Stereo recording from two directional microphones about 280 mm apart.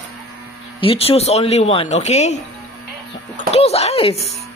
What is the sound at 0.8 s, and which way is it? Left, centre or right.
Speech, centre.